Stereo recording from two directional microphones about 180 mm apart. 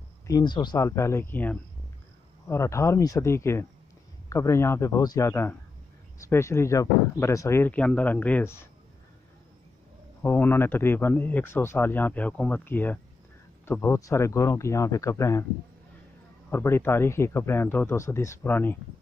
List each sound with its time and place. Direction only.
0.3 s speech: 25° left (ahead or behind)
10.2 s speech: 10° left (ahead or behind)
16.4 s speech: 10° left (ahead or behind)